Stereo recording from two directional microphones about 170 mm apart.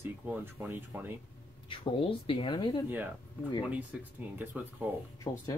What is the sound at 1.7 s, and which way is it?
Speech, 30° left (ahead or behind).